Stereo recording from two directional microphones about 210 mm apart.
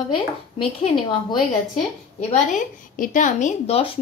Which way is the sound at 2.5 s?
40° left (ahead or behind).